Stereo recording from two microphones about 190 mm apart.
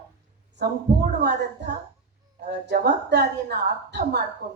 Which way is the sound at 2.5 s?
60° right (ahead or behind).